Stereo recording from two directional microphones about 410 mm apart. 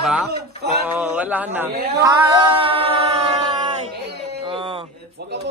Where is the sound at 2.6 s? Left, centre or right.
Centre.